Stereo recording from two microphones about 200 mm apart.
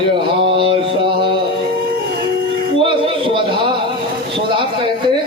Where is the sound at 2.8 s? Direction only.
25° right (ahead or behind).